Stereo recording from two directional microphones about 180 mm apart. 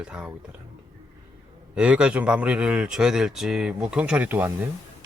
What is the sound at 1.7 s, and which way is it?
Speech, 5° right (ahead or behind).